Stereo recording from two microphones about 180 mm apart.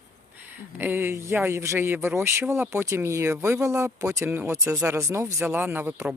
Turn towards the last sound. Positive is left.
turn(degrees=-10)  # may be behind; listen again after turning